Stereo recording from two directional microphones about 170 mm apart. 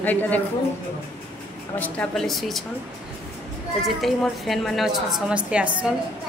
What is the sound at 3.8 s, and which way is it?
A woman's voice, centre (ahead or behind).